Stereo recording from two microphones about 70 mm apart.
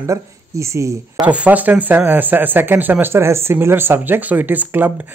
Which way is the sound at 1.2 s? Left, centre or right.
Centre.